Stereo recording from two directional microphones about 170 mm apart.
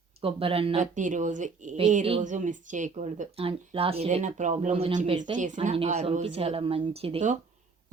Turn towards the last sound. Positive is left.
turn(degrees=-35)  # may be behind; listen again after turning